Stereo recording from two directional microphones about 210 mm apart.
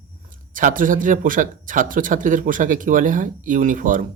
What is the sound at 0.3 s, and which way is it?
Speech, 40° right (ahead or behind).